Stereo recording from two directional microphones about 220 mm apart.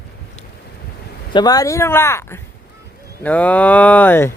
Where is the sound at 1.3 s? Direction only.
20° left (ahead or behind).